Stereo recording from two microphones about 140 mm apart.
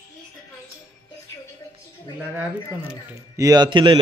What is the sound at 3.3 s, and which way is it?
Speech, 25° right (ahead or behind).